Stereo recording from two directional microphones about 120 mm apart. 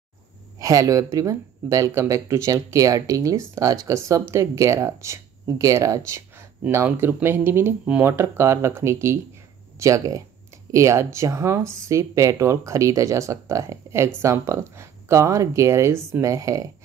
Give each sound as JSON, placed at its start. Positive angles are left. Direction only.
{"t": 0.6, "sound": "speech", "side_deg": -30}